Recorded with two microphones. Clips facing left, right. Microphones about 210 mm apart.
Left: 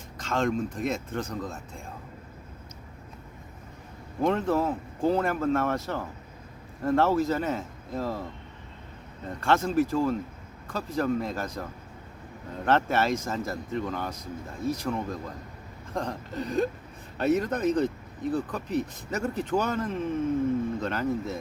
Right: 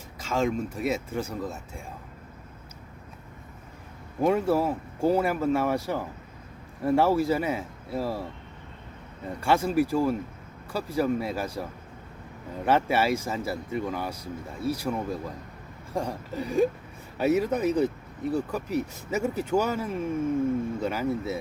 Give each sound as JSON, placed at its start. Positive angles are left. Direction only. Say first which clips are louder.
{"t": 0.2, "sound": "speech", "louder": "even", "side_deg": -5}
{"t": 4.2, "sound": "speech", "louder": "right 2 dB", "side_deg": -10}